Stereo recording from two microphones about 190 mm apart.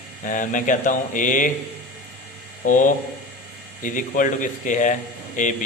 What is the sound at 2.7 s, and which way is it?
A man's voice, 45° left (ahead or behind).